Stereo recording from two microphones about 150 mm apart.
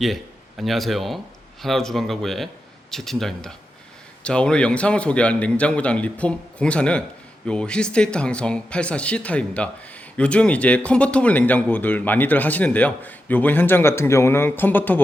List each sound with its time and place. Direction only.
0.0 s a man's voice: centre (ahead or behind)